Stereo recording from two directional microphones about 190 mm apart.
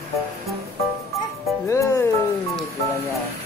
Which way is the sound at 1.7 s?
15° left (ahead or behind).